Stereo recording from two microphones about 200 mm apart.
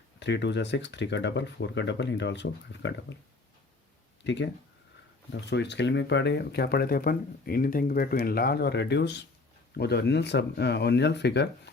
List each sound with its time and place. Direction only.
0.2 s speech: 60° left (ahead or behind)
4.2 s speech: 60° left (ahead or behind)